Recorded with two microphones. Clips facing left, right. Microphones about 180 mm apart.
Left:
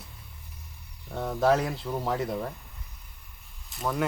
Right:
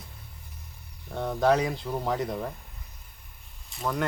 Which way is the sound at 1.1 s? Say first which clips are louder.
Even; centre (ahead or behind).